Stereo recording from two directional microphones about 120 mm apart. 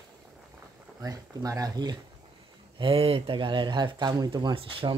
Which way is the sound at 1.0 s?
30° right (ahead or behind).